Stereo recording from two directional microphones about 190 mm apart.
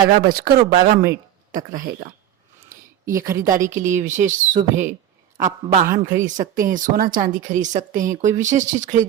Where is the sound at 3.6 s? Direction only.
40° right (ahead or behind).